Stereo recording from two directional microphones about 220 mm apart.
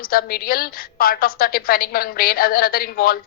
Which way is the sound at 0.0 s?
45° left (ahead or behind).